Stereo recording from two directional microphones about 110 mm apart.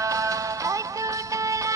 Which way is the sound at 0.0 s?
30° right (ahead or behind).